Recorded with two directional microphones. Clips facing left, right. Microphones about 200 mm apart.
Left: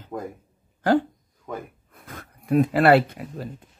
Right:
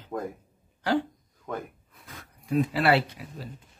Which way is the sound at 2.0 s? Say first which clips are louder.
Left 7 dB; 55° left (ahead or behind).